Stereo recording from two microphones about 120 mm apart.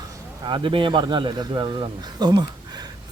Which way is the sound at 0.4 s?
45° right (ahead or behind).